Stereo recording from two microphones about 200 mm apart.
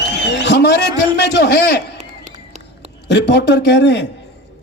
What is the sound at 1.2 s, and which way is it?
Speech, 55° left (ahead or behind).